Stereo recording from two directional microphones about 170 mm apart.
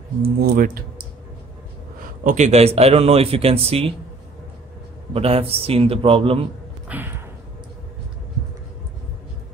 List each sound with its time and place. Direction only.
0.4 s speech: 55° right (ahead or behind)
2.2 s speech: 45° right (ahead or behind)
5.1 s speech: 35° right (ahead or behind)
6.9 s a sound: 10° right (ahead or behind)